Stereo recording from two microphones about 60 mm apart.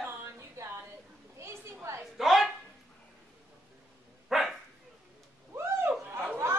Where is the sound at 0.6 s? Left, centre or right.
Right.